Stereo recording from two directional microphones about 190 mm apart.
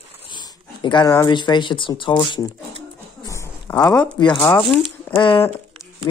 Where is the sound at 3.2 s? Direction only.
15° left (ahead or behind).